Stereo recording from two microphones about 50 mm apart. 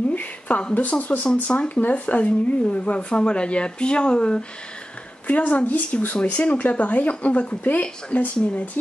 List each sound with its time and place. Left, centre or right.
0.1 s a sound: left
0.7 s speech: left
1.8 s speech: left
5.2 s a woman's voice: left